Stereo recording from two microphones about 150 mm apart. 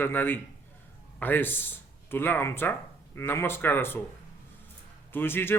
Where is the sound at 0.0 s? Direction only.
15° left (ahead or behind).